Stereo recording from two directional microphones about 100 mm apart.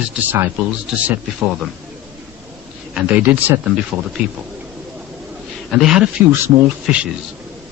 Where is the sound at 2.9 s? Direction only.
15° right (ahead or behind).